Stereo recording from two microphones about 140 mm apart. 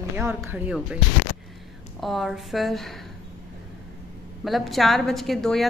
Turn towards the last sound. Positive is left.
turn(degrees=0)  # may be behind; listen again after turning